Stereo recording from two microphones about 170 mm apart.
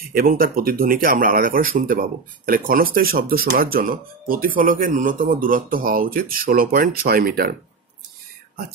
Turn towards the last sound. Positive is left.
turn(degrees=-60)  # may be behind; listen again after turning